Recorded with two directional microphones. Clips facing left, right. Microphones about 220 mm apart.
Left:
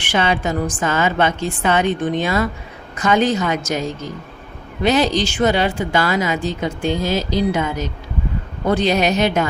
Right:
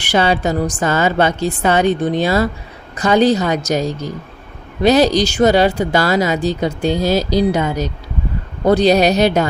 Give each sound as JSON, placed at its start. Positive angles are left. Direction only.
{"t": 0.0, "sound": "speech", "side_deg": -40}